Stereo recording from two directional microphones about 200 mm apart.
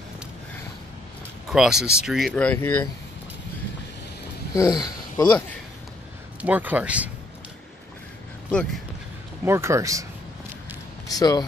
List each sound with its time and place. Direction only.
1.5 s speech: centre (ahead or behind)
4.6 s speech: 20° left (ahead or behind)
6.4 s speech: 10° right (ahead or behind)
8.5 s speech: 5° left (ahead or behind)
9.4 s speech: 15° right (ahead or behind)
11.1 s speech: 20° left (ahead or behind)